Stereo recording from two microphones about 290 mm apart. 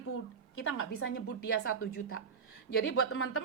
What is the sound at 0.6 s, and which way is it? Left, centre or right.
Speech, left.